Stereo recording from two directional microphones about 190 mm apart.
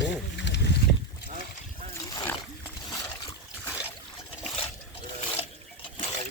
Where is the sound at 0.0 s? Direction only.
70° left (ahead or behind).